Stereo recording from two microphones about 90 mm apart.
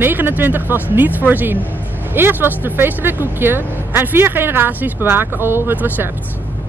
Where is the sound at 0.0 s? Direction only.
20° right (ahead or behind).